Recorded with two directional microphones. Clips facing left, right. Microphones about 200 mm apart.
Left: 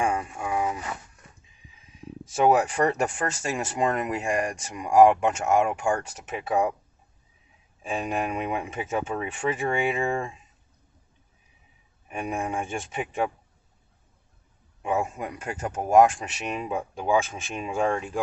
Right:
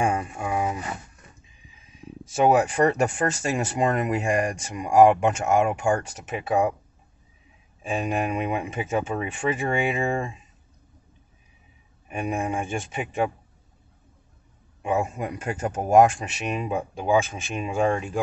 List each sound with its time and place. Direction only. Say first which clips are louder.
0.0 s a sound: right 2 dB; 15° right (ahead or behind)
2.3 s speech: right 2 dB; 15° right (ahead or behind)
7.8 s speech: right 2 dB; 15° right (ahead or behind)
12.1 s speech: right 3 dB; 15° right (ahead or behind)
14.8 s speech: right 2 dB; 15° right (ahead or behind)